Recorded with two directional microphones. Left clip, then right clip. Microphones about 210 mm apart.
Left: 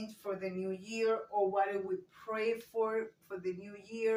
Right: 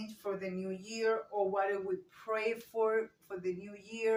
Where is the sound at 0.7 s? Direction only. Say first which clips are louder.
Even; 25° right (ahead or behind).